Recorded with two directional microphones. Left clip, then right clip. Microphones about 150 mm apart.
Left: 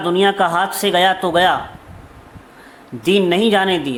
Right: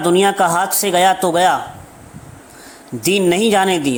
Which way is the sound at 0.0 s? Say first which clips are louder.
Right 2 dB; 30° right (ahead or behind).